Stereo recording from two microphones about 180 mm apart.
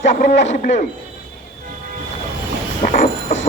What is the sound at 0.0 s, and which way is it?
Speech, 40° left (ahead or behind).